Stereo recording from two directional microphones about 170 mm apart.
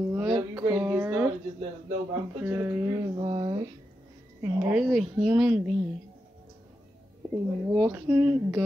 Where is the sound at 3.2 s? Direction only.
25° right (ahead or behind).